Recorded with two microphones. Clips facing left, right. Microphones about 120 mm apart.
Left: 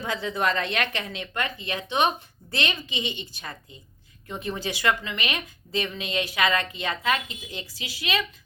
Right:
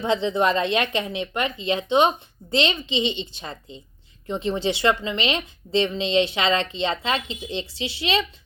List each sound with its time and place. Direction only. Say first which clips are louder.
0.0 s speech: right 6 dB; 25° right (ahead or behind)